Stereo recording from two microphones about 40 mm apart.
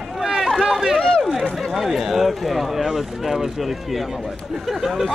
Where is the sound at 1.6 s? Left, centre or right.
Centre.